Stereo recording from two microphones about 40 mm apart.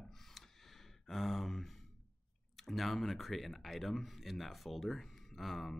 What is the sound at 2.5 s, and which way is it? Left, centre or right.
Speech, centre.